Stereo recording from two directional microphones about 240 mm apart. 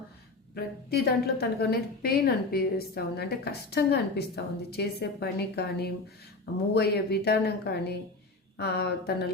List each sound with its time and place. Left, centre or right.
0.5 s a woman's voice: left